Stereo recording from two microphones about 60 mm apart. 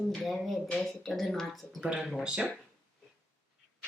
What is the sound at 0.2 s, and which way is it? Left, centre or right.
A woman's voice, centre.